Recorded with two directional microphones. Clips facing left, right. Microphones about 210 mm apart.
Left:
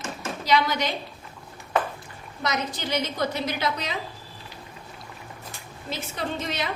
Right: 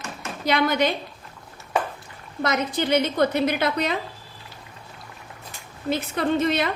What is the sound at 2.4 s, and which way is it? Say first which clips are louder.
A woman's voice: right 5 dB; 55° right (ahead or behind).